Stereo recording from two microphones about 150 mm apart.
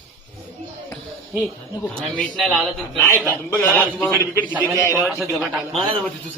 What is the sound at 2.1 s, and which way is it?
A man's voice, 5° left (ahead or behind).